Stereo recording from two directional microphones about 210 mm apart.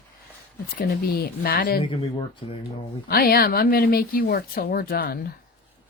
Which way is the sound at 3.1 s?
45° left (ahead or behind).